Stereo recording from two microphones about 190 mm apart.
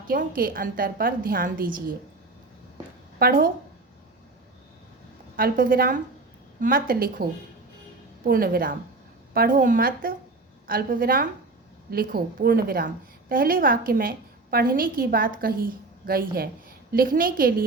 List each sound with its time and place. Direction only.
0.1 s a woman's voice: 50° right (ahead or behind)
3.2 s a woman's voice: 50° right (ahead or behind)
5.4 s a woman's voice: 50° right (ahead or behind)
8.3 s a woman's voice: 50° right (ahead or behind)